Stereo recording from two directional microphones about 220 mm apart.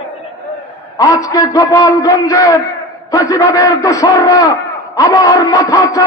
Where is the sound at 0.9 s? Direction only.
15° left (ahead or behind).